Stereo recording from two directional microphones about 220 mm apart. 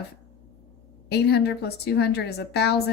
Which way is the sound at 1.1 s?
50° left (ahead or behind).